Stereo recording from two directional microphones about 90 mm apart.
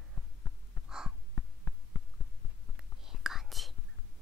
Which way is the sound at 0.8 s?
5° right (ahead or behind).